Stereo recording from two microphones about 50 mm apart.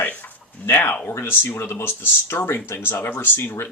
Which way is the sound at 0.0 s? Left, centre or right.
Left.